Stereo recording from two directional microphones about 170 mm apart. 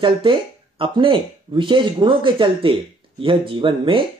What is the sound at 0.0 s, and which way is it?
Speech, 30° right (ahead or behind).